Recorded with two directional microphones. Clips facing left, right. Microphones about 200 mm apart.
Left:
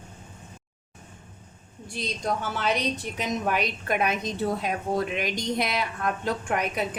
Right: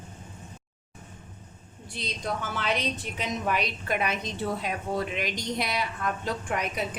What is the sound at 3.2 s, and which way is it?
A woman's voice, 50° left (ahead or behind).